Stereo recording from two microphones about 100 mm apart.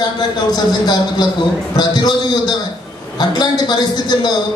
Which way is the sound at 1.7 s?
45° left (ahead or behind).